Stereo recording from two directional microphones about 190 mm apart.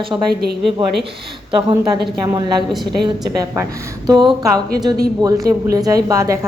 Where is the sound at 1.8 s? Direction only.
20° right (ahead or behind).